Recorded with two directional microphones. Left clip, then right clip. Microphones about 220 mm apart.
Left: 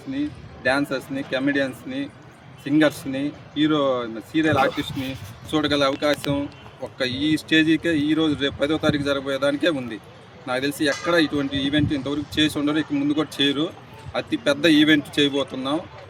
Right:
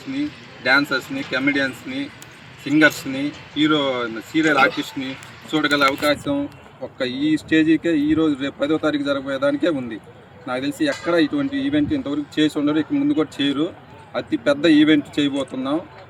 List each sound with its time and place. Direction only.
0.6 s speech: 25° left (ahead or behind)
7.0 s speech: centre (ahead or behind)